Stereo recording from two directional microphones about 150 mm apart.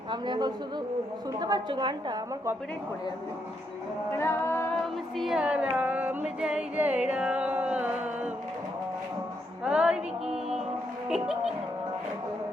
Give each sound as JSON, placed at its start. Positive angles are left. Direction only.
{"t": 0.1, "sound": "a woman's voice", "side_deg": -30}
{"t": 4.2, "sound": "music", "side_deg": 15}
{"t": 5.1, "sound": "music", "side_deg": 0}
{"t": 9.6, "sound": "music", "side_deg": -5}
{"t": 11.1, "sound": "speech", "side_deg": -5}